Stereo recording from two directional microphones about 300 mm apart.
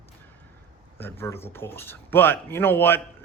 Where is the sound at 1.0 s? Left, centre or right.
Centre.